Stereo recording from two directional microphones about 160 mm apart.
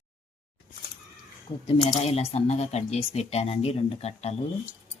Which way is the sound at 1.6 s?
40° left (ahead or behind).